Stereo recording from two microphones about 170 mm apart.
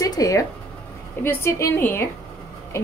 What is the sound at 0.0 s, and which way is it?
Zipper, 20° left (ahead or behind).